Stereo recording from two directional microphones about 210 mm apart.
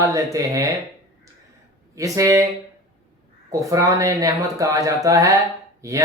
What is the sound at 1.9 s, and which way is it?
Speech, 15° right (ahead or behind).